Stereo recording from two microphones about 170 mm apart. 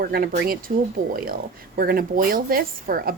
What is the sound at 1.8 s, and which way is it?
A woman's voice, 60° right (ahead or behind).